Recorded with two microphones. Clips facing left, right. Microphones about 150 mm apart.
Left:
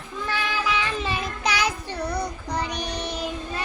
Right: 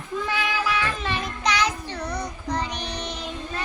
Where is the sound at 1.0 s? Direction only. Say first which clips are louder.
Even; 5° left (ahead or behind).